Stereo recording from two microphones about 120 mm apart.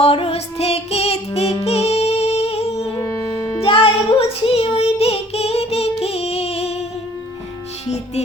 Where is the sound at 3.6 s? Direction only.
50° left (ahead or behind).